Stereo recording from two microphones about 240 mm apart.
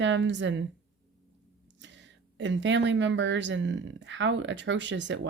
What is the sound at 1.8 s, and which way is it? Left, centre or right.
Speech, right.